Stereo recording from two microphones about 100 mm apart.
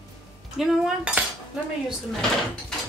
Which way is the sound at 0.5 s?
5° right (ahead or behind).